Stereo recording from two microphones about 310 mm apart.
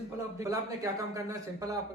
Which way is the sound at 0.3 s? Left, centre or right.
Centre.